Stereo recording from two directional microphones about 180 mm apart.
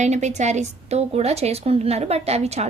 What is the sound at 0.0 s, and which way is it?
A woman's voice, 40° right (ahead or behind).